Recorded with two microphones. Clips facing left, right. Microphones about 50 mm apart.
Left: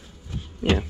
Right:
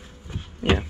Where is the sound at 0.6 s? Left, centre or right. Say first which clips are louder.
Even; centre.